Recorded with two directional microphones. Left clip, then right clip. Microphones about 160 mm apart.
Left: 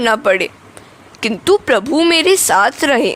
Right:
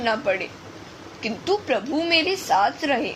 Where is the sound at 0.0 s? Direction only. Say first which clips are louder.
Left 10 dB; 60° left (ahead or behind).